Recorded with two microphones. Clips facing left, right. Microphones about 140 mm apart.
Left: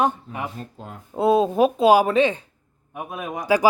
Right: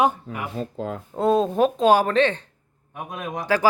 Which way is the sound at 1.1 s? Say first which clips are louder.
Left 2 dB; 10° left (ahead or behind).